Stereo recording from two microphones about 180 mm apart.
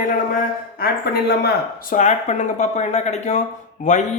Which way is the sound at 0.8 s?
60° left (ahead or behind).